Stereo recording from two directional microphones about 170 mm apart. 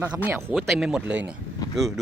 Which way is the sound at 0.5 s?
Centre (ahead or behind).